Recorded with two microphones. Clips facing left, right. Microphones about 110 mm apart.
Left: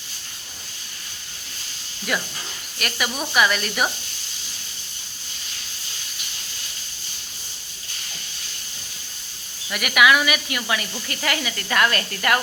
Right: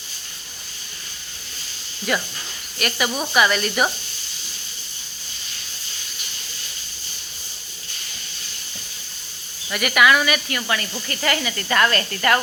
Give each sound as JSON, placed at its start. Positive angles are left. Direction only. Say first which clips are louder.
{"t": 2.1, "sound": "speech", "louder": "right 2 dB", "side_deg": 0}
{"t": 9.6, "sound": "speech", "louder": "right 1 dB", "side_deg": 0}